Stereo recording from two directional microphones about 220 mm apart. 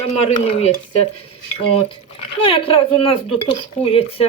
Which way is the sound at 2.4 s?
25° left (ahead or behind).